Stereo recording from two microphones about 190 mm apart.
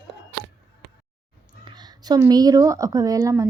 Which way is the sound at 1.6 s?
20° right (ahead or behind).